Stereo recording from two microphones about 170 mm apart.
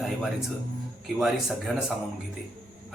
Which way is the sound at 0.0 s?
Centre (ahead or behind).